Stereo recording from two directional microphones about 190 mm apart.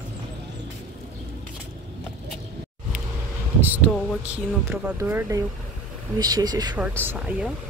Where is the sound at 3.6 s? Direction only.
10° right (ahead or behind).